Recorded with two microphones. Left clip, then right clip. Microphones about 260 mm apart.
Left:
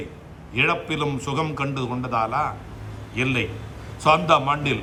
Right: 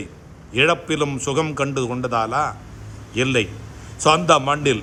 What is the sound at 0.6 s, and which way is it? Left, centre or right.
Speech, right.